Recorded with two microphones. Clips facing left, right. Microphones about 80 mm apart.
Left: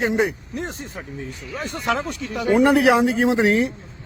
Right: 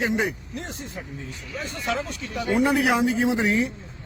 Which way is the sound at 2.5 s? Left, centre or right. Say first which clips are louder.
Left 6 dB; left.